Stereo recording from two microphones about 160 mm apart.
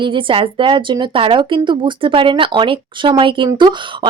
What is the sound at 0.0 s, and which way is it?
A woman's voice, 30° right (ahead or behind).